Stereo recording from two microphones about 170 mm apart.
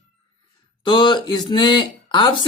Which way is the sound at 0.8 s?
30° left (ahead or behind).